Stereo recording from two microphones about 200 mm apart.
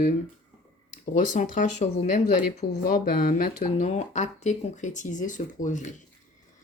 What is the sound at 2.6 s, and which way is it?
Speech, 55° left (ahead or behind).